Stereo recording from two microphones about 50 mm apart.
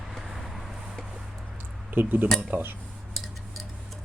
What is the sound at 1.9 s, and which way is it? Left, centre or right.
Speech, right.